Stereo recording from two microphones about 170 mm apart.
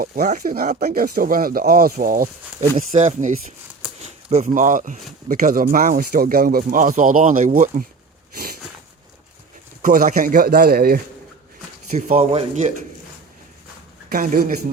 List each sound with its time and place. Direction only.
0.3 s speech: 50° right (ahead or behind)
9.8 s speech: 50° right (ahead or behind)
11.9 s speech: 45° right (ahead or behind)
14.1 s speech: 55° right (ahead or behind)